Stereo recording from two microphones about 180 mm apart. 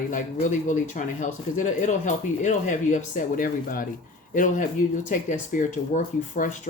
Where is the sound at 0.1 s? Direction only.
45° left (ahead or behind).